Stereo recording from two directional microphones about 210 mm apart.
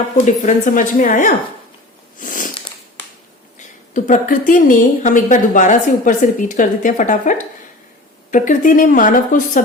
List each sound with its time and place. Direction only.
0.3 s a woman's voice: 35° left (ahead or behind)
2.1 s sniff: 40° left (ahead or behind)
3.9 s a woman's voice: 35° left (ahead or behind)